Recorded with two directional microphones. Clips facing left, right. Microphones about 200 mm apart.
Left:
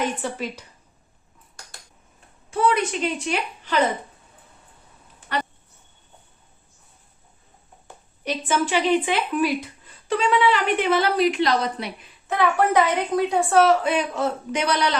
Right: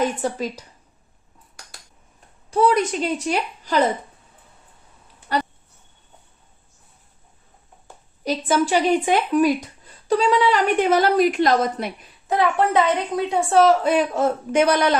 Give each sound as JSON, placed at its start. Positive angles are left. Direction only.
{"t": 0.0, "sound": "a child's voice", "side_deg": -40}
{"t": 2.5, "sound": "a child's voice", "side_deg": -40}
{"t": 8.2, "sound": "speech", "side_deg": -40}
{"t": 12.3, "sound": "a woman's voice", "side_deg": -25}
{"t": 13.8, "sound": "speech", "side_deg": -45}